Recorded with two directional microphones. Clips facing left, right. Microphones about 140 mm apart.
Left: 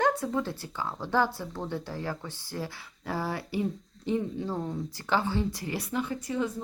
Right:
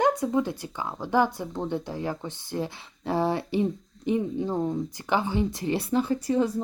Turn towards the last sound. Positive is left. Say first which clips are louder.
# right 6 dB
turn(degrees=-35)  # may be behind; listen again after turning